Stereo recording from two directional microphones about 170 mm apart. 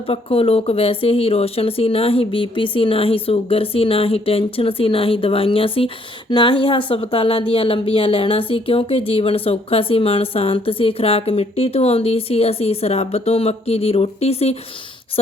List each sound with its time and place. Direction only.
0.1 s a woman's voice: 35° left (ahead or behind)